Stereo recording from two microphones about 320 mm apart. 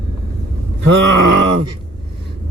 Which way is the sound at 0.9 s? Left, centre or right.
Right.